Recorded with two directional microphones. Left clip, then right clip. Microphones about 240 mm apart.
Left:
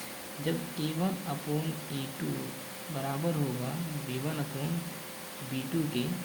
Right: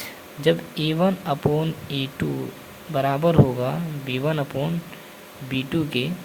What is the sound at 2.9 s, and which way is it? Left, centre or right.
Speech, right.